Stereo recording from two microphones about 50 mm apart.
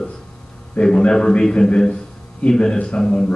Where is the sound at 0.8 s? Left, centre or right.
Centre.